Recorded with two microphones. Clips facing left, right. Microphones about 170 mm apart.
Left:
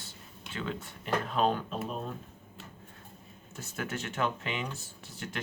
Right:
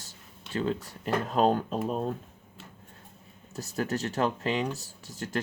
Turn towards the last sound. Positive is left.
turn(degrees=-40)  # may be behind; listen again after turning